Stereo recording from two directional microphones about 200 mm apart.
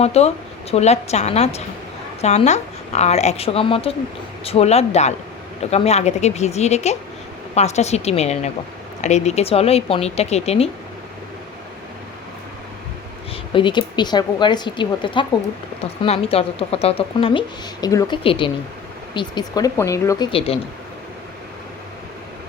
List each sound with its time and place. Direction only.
0.0 s speech: 30° left (ahead or behind)
13.5 s a woman's voice: 25° left (ahead or behind)